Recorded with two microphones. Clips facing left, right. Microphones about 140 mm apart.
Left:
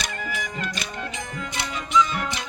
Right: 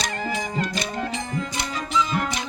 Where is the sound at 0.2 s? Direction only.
30° right (ahead or behind).